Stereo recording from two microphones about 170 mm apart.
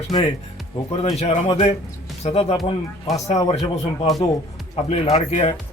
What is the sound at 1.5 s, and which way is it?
Speech, 35° left (ahead or behind).